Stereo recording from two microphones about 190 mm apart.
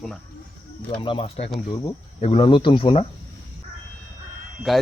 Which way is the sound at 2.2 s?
35° left (ahead or behind).